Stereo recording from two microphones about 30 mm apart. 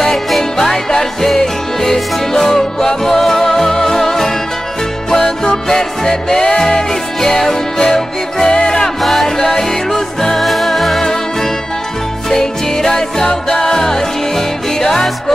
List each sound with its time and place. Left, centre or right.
0.4 s music: centre
9.0 s music: centre
10.4 s music: centre
12.3 s music: centre